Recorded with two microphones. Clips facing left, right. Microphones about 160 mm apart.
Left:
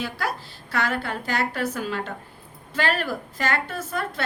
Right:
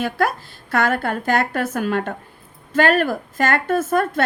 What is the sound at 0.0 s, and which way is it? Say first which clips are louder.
A woman's voice: right 8 dB; 50° right (ahead or behind).